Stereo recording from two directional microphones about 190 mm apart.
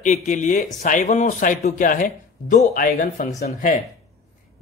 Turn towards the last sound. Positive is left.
turn(degrees=45)  # may be behind; listen again after turning